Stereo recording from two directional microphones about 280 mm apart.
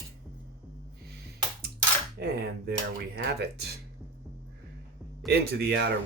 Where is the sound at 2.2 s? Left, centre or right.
Right.